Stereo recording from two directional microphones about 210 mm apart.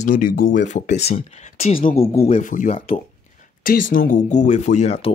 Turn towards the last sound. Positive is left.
turn(degrees=30)  # may be behind; listen again after turning